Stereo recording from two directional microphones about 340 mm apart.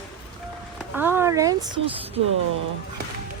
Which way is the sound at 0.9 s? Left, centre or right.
Centre.